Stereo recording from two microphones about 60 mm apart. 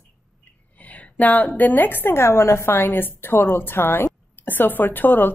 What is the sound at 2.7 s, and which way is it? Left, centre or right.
A woman's voice, left.